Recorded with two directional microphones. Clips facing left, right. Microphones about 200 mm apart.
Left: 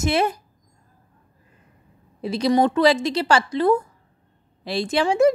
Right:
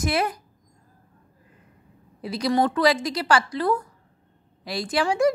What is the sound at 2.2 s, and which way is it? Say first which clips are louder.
A woman's voice: left 4 dB; 25° left (ahead or behind).